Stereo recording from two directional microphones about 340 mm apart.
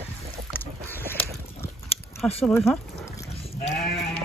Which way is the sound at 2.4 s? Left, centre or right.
Centre.